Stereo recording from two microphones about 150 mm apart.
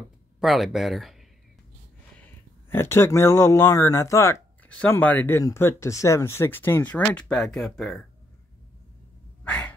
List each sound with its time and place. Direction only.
0.4 s speech: centre (ahead or behind)
2.1 s speech: 15° left (ahead or behind)
9.4 s a sound: 10° left (ahead or behind)